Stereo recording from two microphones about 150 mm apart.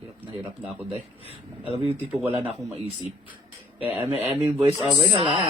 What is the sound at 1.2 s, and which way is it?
Speech, 40° left (ahead or behind).